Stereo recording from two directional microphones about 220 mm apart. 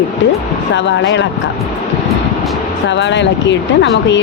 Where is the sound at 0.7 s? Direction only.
55° left (ahead or behind).